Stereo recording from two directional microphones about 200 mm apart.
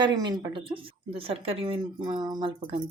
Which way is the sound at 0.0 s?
20° right (ahead or behind).